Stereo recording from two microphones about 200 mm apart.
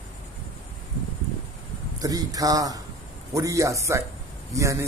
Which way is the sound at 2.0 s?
20° right (ahead or behind).